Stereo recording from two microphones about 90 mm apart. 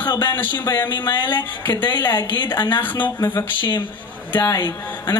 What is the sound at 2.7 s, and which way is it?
Speech, 20° left (ahead or behind).